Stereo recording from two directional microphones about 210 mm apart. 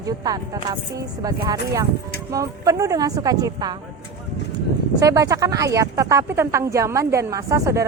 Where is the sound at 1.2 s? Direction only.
15° right (ahead or behind).